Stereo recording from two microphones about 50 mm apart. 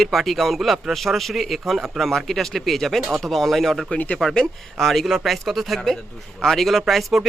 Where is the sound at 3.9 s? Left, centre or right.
Left.